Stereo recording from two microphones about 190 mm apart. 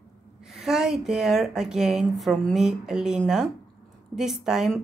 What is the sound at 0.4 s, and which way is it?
A woman's voice, centre (ahead or behind).